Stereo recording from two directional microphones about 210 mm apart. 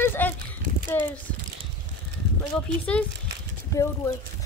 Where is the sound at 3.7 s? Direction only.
15° left (ahead or behind).